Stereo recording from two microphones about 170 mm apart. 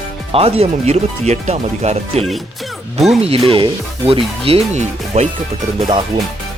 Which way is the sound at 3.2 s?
35° right (ahead or behind).